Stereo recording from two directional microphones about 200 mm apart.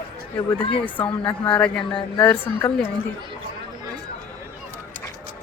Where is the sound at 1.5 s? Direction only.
5° left (ahead or behind).